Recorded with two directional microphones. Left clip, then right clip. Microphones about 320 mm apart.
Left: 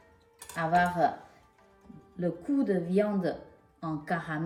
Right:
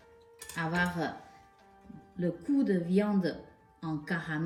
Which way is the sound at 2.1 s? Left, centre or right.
Left.